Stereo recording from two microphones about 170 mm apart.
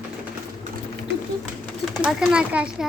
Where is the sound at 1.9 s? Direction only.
5° right (ahead or behind).